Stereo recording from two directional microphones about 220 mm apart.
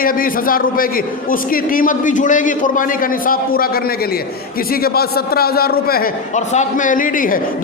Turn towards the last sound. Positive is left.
turn(degrees=40)  # may be behind; listen again after turning